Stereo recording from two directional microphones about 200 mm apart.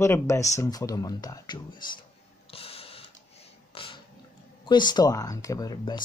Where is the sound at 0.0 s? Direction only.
15° left (ahead or behind).